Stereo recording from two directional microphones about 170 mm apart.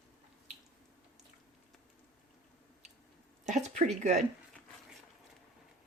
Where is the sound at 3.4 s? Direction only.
45° right (ahead or behind).